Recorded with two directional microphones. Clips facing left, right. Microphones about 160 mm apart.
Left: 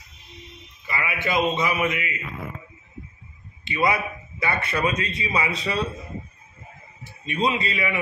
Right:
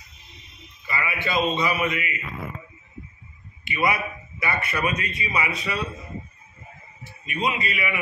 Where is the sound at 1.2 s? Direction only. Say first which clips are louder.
Left 1 dB; 20° left (ahead or behind).